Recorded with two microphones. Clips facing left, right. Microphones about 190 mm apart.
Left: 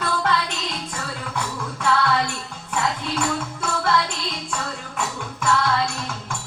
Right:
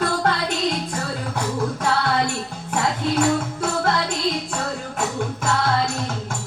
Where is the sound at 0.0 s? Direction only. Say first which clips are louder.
Right 2 dB; 45° right (ahead or behind).